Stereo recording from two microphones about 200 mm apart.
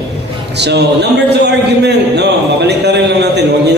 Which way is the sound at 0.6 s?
55° right (ahead or behind).